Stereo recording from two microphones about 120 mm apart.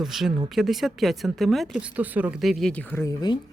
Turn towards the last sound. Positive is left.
turn(degrees=35)  # may be behind; listen again after turning